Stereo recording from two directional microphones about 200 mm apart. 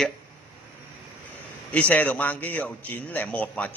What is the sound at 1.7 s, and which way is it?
A man's voice, 10° left (ahead or behind).